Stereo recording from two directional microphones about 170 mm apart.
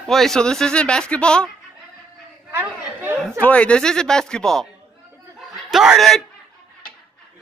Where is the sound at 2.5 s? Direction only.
10° right (ahead or behind).